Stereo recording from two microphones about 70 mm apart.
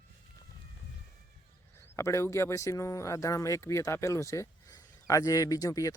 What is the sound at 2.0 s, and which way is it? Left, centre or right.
Speech, left.